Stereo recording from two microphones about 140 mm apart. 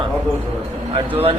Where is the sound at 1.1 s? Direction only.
45° right (ahead or behind).